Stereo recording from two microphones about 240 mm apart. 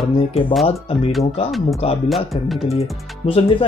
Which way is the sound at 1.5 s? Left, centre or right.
Centre.